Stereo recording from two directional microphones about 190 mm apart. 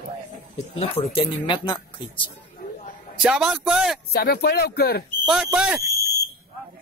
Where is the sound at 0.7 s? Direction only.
30° left (ahead or behind).